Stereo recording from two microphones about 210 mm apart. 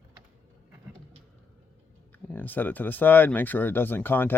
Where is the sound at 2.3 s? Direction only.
10° left (ahead or behind).